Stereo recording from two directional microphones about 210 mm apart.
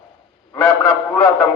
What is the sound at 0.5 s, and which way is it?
Speech, 5° left (ahead or behind).